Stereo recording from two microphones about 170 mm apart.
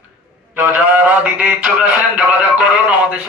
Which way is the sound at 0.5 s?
10° right (ahead or behind).